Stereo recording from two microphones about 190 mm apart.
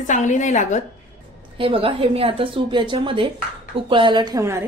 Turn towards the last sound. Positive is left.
turn(degrees=-15)  # may be behind; listen again after turning